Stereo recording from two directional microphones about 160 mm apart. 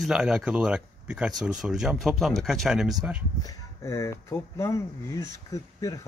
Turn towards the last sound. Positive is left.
turn(degrees=20)  # may be behind; listen again after turning